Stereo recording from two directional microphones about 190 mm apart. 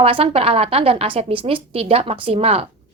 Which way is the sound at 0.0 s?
30° right (ahead or behind).